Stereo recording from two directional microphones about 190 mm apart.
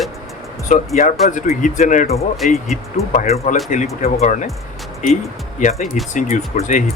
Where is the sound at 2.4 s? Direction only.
Centre (ahead or behind).